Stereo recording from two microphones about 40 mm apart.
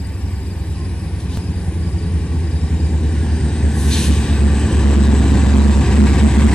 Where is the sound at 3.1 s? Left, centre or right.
Centre.